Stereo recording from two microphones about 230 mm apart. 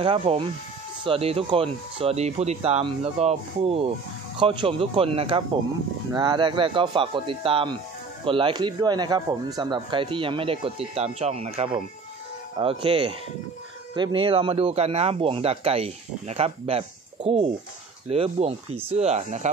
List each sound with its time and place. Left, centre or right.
0.0 s speech: right